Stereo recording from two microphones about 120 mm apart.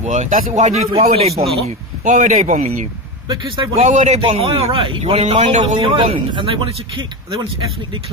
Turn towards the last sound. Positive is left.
turn(degrees=-45)  # may be behind; listen again after turning